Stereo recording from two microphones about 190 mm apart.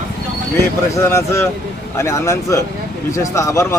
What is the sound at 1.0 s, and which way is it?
Speech, 15° left (ahead or behind).